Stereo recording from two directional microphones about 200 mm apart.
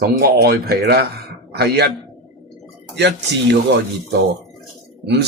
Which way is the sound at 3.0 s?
60° right (ahead or behind).